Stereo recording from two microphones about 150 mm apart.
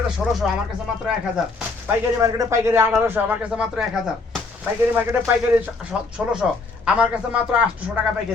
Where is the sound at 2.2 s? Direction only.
20° right (ahead or behind); by 3.9 s 5° right (ahead or behind).